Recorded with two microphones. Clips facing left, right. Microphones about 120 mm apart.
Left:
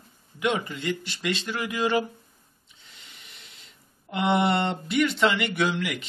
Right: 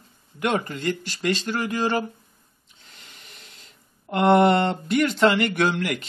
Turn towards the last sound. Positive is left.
turn(degrees=-45)  # may be behind; listen again after turning